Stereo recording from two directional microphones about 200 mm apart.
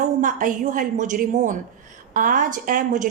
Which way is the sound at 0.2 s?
40° right (ahead or behind).